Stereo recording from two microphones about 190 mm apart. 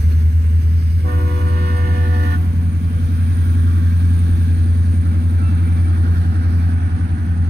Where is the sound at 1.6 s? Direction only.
60° right (ahead or behind).